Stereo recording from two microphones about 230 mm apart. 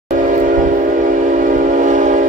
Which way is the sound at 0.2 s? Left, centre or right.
Right.